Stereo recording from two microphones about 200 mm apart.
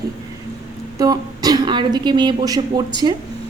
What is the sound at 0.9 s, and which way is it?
Speech, 20° right (ahead or behind).